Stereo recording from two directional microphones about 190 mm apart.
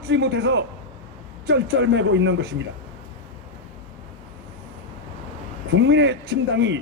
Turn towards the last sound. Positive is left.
turn(degrees=-65)  # may be behind; listen again after turning